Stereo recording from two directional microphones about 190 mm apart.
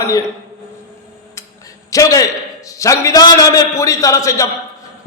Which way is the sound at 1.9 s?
15° left (ahead or behind).